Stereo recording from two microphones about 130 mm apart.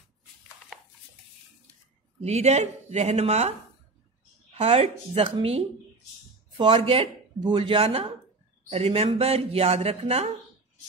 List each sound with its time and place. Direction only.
2.2 s speech: 60° right (ahead or behind)
4.6 s a woman's voice: 55° right (ahead or behind)